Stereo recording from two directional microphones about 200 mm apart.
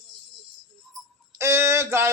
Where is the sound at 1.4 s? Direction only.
15° right (ahead or behind).